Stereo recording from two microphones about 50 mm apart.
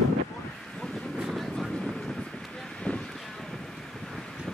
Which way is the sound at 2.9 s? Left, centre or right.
Left.